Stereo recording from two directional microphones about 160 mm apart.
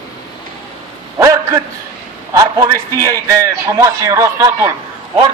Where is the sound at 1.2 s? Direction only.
20° right (ahead or behind).